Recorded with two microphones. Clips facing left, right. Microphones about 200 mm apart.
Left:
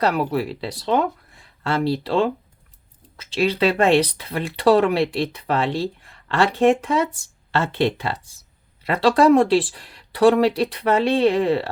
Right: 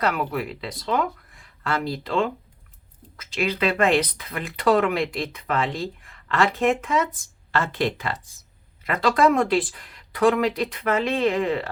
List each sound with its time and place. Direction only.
0.0 s speech: 30° left (ahead or behind)